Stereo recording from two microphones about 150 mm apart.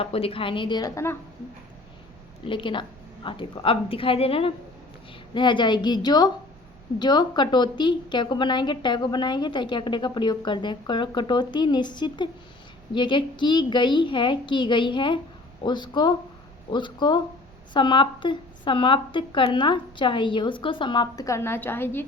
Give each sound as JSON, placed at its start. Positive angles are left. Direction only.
{"t": 0.0, "sound": "a woman's voice", "side_deg": 40}
{"t": 2.4, "sound": "a woman's voice", "side_deg": 35}